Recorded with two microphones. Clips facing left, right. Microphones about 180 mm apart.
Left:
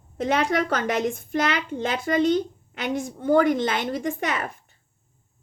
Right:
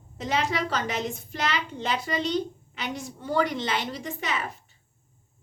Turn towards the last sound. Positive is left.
turn(degrees=55)  # may be behind; listen again after turning